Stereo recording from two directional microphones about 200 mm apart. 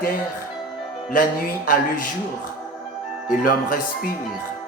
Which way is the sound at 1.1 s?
45° left (ahead or behind).